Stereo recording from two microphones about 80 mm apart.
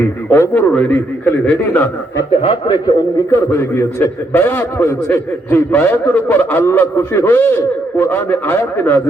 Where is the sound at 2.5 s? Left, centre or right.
Left.